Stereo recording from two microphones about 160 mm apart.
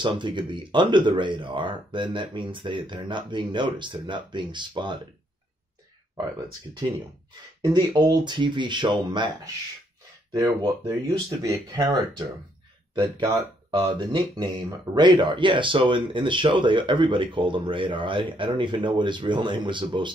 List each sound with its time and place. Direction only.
0.0 s speech: 30° right (ahead or behind)
6.8 s speech: 30° right (ahead or behind)